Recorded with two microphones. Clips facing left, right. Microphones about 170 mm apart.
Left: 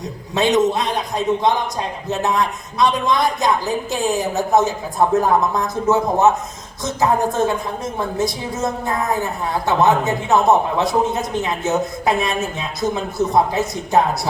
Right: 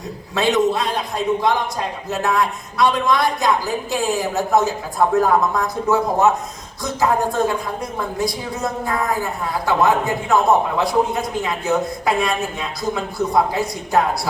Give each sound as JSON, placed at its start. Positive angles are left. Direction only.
{"t": 0.3, "sound": "a woman's voice", "side_deg": 20}